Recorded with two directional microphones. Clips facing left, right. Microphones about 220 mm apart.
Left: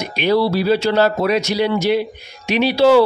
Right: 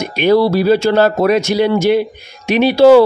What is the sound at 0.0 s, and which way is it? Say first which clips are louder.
Speech: right 5 dB; 50° right (ahead or behind).